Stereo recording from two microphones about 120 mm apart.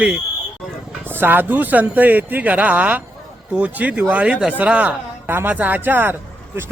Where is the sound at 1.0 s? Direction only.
15° right (ahead or behind).